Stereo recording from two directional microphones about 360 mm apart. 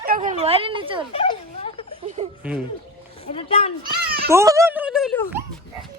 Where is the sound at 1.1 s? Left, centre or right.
Centre.